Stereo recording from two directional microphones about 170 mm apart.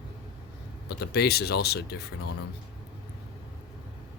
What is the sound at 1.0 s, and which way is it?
Speech, 70° left (ahead or behind).